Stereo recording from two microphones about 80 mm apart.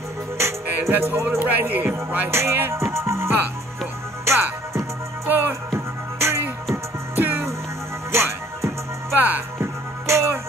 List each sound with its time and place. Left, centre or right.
0.4 s music: right
5.3 s music: right
5.7 s music: right
7.2 s music: right
8.1 s music: right